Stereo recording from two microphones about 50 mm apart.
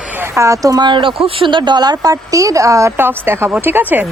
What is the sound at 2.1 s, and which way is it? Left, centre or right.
Speech, right.